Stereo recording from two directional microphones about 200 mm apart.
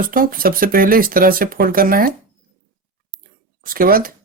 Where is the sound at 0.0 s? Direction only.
45° right (ahead or behind).